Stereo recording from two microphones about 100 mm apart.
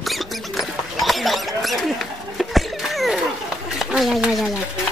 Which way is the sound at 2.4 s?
Centre (ahead or behind).